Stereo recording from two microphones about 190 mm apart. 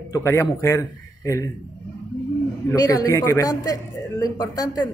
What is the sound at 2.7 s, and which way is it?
A woman's voice, 20° left (ahead or behind).